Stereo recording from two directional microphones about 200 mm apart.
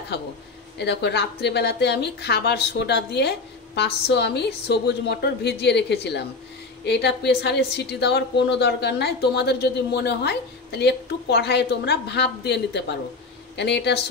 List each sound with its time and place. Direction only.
0.7 s speech: 60° left (ahead or behind)